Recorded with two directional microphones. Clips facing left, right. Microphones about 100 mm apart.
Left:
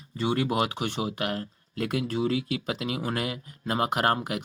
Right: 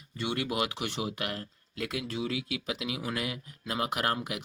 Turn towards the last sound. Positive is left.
turn(degrees=50)  # may be behind; listen again after turning